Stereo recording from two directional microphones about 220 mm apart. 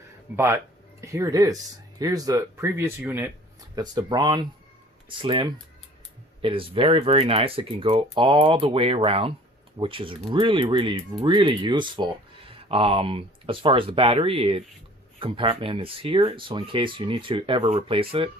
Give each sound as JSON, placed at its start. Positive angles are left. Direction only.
{"t": 0.3, "sound": "speech", "side_deg": -10}
{"t": 3.8, "sound": "speech", "side_deg": -20}